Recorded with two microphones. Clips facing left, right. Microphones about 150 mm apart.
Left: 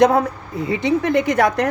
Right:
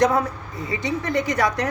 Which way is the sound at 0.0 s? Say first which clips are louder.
Left 5 dB; 55° left (ahead or behind).